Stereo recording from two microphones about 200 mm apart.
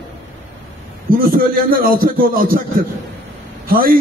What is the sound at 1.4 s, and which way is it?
A man's voice, 45° right (ahead or behind).